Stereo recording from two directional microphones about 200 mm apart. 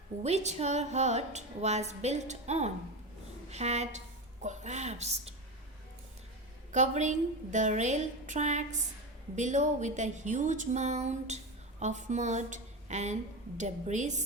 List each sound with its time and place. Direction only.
0.2 s a woman's voice: 35° right (ahead or behind)
6.7 s a woman's voice: 35° right (ahead or behind)